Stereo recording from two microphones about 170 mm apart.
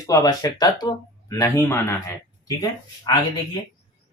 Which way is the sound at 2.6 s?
25° left (ahead or behind).